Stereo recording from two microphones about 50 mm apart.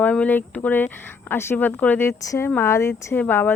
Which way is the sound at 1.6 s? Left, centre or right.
Left.